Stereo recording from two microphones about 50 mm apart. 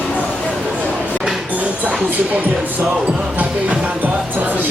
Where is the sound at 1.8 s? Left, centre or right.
Right.